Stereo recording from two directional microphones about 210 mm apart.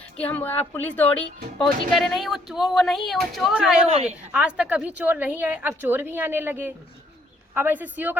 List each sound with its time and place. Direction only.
0.2 s speech: 5° left (ahead or behind)
3.8 s a woman's voice: 30° right (ahead or behind)
4.3 s a woman's voice: 5° right (ahead or behind)